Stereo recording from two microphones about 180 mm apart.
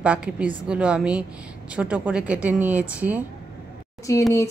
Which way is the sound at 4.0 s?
15° left (ahead or behind).